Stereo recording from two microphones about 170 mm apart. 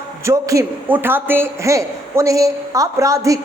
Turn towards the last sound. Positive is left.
turn(degrees=-20)  # may be behind; listen again after turning